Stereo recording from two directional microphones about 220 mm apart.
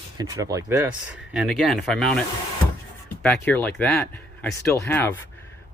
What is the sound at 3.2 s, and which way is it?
Speech, 5° left (ahead or behind).